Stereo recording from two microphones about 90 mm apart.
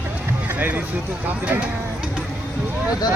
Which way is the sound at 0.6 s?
20° right (ahead or behind).